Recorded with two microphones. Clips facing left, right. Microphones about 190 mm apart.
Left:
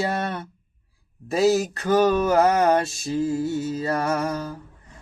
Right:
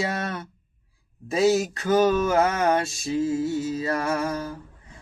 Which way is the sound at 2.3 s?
35° left (ahead or behind).